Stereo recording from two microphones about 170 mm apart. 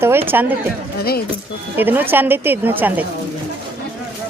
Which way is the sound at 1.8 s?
10° right (ahead or behind).